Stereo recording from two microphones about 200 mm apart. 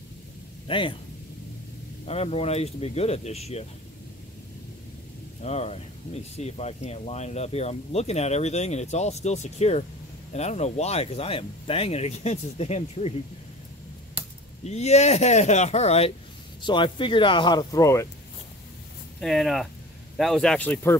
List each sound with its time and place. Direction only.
0.7 s speech: 25° left (ahead or behind)
2.0 s speech: 30° left (ahead or behind)
5.4 s speech: 30° left (ahead or behind)
14.6 s speech: 35° left (ahead or behind); by 18.0 s 15° left (ahead or behind)
19.2 s speech: centre (ahead or behind)